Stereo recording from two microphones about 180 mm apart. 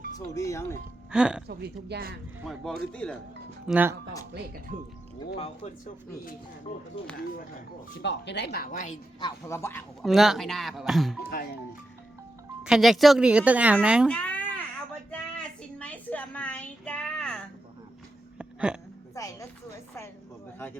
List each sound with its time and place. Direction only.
0.3 s speech: 15° left (ahead or behind)
1.1 s speech: 5° right (ahead or behind)
1.5 s speech: 65° right (ahead or behind)
2.4 s speech: centre (ahead or behind)
3.7 s speech: 10° right (ahead or behind)
5.4 s speech: 40° left (ahead or behind)
8.0 s speech: 75° left (ahead or behind); by 9.0 s 50° left (ahead or behind)
9.2 s speech: 15° left (ahead or behind)
10.0 s speech: centre (ahead or behind)
12.6 s speech: centre (ahead or behind)
14.1 s a sound: 5° left (ahead or behind)
15.8 s music: 10° left (ahead or behind)
18.3 s hiccup: 5° right (ahead or behind)
19.1 s speech: 20° left (ahead or behind)